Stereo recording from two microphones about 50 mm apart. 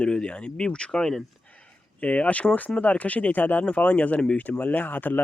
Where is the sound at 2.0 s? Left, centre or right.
Left.